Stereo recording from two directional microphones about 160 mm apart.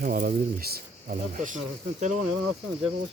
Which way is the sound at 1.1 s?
55° right (ahead or behind).